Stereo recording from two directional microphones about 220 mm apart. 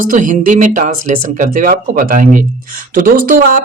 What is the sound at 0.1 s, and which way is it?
Speech, 35° right (ahead or behind).